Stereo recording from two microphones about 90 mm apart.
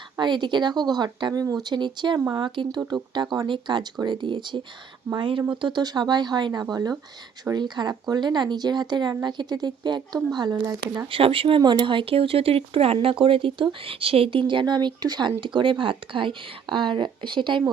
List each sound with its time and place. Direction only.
0.2 s speech: 60° right (ahead or behind); by 1.5 s 45° right (ahead or behind)
1.6 s speech: 55° right (ahead or behind)
2.1 s speech: 45° right (ahead or behind)
5.1 s speech: 75° right (ahead or behind)
5.4 s speech: 60° right (ahead or behind)
11.1 s speech: 85° right
11.6 s speech: 55° right (ahead or behind)